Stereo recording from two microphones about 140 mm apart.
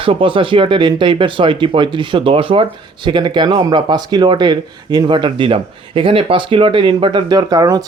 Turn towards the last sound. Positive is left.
turn(degrees=-25)  # may be behind; listen again after turning